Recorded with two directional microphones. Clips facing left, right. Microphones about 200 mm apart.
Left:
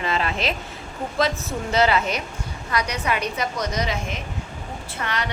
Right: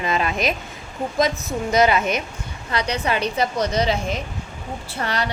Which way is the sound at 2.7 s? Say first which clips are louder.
Right 2 dB; 30° right (ahead or behind).